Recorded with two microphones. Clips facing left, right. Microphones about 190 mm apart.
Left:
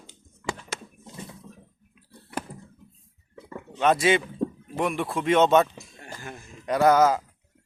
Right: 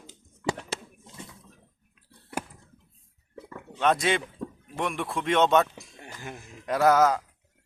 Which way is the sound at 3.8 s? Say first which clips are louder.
Left 3 dB; 5° left (ahead or behind).